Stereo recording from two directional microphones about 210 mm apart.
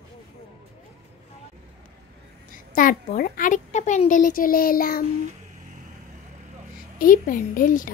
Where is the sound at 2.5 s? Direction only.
40° left (ahead or behind).